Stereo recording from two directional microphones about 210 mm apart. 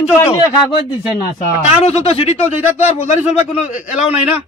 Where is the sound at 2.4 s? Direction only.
10° right (ahead or behind).